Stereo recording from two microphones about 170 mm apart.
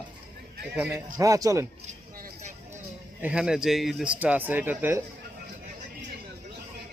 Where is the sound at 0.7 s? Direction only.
10° right (ahead or behind).